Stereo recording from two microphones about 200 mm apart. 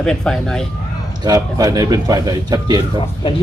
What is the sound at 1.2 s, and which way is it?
Speech, 20° right (ahead or behind).